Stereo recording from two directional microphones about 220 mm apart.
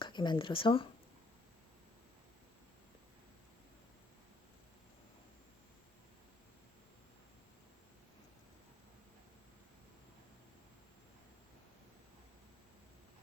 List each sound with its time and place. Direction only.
0.0 s speech: 20° left (ahead or behind)